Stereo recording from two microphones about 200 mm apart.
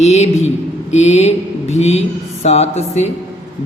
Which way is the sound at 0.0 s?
35° left (ahead or behind).